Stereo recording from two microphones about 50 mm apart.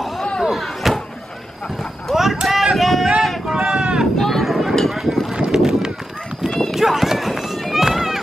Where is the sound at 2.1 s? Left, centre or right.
Centre.